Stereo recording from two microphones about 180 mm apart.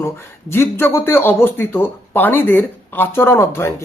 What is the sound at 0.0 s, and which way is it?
Speech, 15° left (ahead or behind).